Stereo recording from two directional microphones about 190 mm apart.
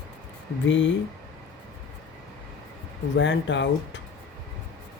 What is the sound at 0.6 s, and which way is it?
Speech, 75° left (ahead or behind).